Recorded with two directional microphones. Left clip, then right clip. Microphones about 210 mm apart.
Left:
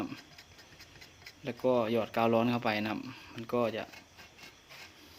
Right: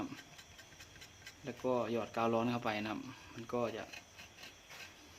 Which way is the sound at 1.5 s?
35° left (ahead or behind).